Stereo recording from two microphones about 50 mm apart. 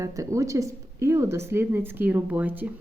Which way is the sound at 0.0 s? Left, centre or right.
Right.